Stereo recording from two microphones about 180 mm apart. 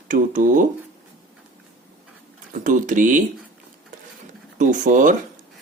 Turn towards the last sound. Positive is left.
turn(degrees=-45)  # may be behind; listen again after turning